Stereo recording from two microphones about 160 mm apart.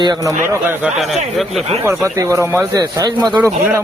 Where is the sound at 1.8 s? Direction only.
15° right (ahead or behind).